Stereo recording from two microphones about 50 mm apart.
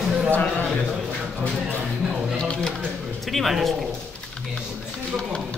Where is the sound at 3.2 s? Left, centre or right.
Centre.